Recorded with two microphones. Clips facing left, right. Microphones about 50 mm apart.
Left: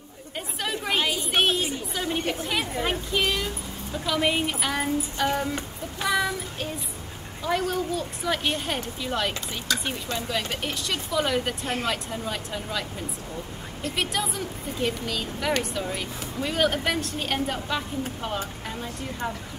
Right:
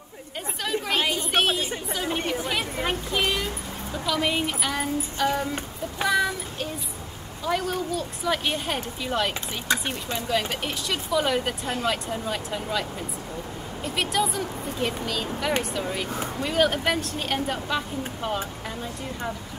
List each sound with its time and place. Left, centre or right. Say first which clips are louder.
0.7 s chatter: right 1 dB; centre
1.0 s a sound: even; centre
2.0 s a woman's voice: even; centre
4.0 s a woman's voice: left 1 dB; centre
9.7 s speech: right 3 dB; right
10.1 s a woman's voice: right 4 dB; centre
13.9 s a woman's voice: right 4 dB; centre